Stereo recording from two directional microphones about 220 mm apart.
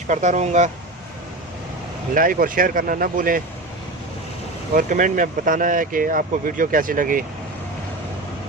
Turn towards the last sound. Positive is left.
turn(degrees=-40)  # may be behind; listen again after turning